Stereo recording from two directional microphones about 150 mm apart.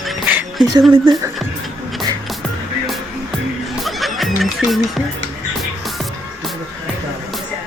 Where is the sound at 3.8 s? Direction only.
Centre (ahead or behind).